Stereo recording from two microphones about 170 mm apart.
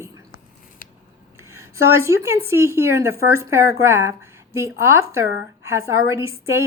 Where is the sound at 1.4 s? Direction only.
15° right (ahead or behind).